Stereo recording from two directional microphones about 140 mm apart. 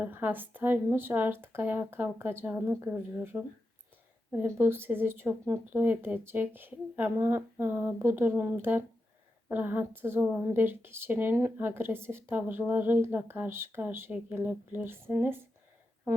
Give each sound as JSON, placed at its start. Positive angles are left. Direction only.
{"t": 0.0, "sound": "a woman's voice", "side_deg": -15}